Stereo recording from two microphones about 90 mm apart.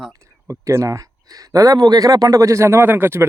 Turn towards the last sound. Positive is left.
turn(degrees=-25)  # may be behind; listen again after turning